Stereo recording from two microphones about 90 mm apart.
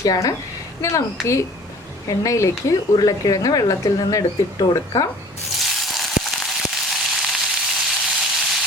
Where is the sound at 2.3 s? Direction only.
35° left (ahead or behind).